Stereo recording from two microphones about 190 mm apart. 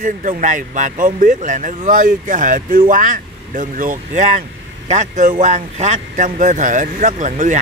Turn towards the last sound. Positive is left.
turn(degrees=-40)  # may be behind; listen again after turning